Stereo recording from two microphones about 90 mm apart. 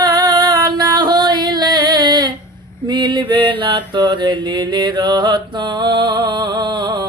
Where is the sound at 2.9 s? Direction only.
60° right (ahead or behind).